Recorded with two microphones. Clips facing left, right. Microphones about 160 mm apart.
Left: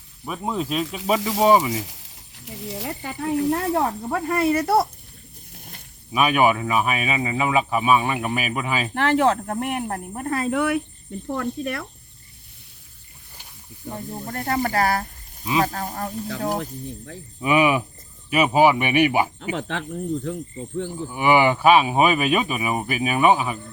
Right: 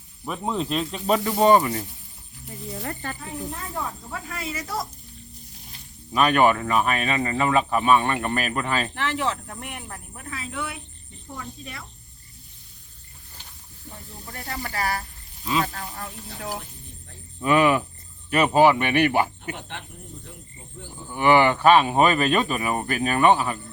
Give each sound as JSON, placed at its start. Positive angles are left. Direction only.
{"t": 0.3, "sound": "speech", "side_deg": 5}
{"t": 1.7, "sound": "a sound", "side_deg": 90}
{"t": 2.8, "sound": "speech", "side_deg": 10}
{"t": 3.2, "sound": "speech", "side_deg": 75}
{"t": 5.5, "sound": "a sound", "side_deg": 55}
{"t": 6.1, "sound": "speech", "side_deg": 10}
{"t": 9.0, "sound": "speech", "side_deg": 50}
{"t": 13.8, "sound": "speech", "side_deg": 50}
{"t": 17.4, "sound": "speech", "side_deg": 10}
{"t": 19.4, "sound": "speech", "side_deg": 90}
{"t": 21.1, "sound": "speech", "side_deg": 10}